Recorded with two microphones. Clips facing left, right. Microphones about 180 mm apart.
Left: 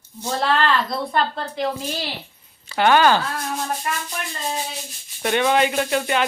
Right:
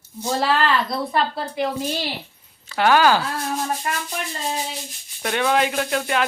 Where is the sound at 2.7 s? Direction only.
Centre (ahead or behind).